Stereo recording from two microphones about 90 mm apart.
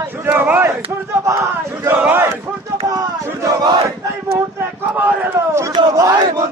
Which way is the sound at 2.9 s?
40° right (ahead or behind).